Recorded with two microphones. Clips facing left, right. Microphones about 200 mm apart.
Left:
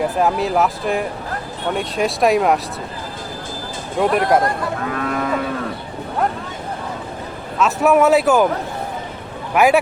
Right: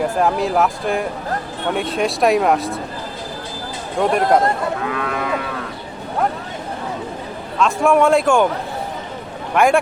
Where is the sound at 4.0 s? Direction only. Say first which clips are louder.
Even; centre (ahead or behind).